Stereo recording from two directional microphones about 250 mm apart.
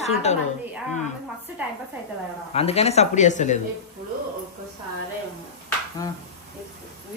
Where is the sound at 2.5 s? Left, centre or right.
Left.